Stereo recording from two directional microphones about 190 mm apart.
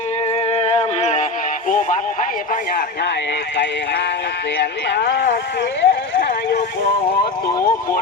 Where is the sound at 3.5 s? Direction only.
65° left (ahead or behind).